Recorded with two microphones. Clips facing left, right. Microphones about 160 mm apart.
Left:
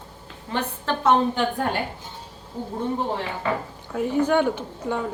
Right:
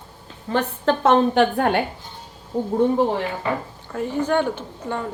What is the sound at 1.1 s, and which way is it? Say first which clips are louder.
Speech: right 3 dB; 75° right (ahead or behind).